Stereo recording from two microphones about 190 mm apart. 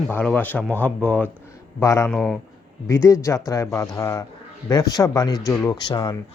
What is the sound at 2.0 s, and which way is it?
Speech, centre (ahead or behind).